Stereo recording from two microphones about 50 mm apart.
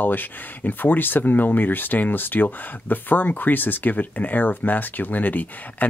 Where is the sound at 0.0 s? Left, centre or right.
Left.